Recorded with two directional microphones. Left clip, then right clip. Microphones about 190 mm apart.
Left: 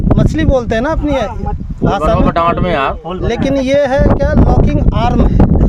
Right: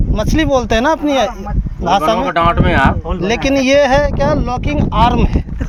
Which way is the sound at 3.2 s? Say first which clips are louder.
Right 1 dB; 15° left (ahead or behind).